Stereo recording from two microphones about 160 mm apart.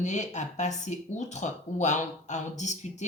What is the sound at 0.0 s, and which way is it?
Speech, 45° left (ahead or behind).